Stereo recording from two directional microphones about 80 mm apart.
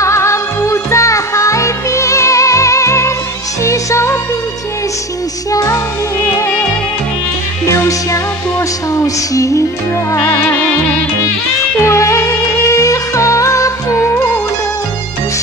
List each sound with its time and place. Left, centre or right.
0.0 s music: left
5.5 s music: left
7.7 s music: left
10.1 s music: left
11.8 s music: left